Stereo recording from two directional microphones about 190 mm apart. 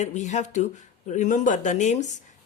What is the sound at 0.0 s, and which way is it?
A woman's voice, 40° left (ahead or behind).